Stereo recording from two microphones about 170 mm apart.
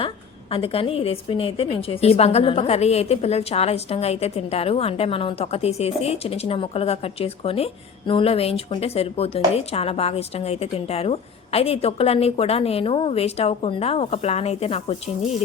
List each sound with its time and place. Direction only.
0.5 s a woman's voice: 35° left (ahead or behind)